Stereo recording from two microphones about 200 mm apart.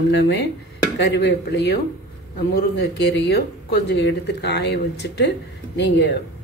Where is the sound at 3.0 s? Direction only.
55° left (ahead or behind).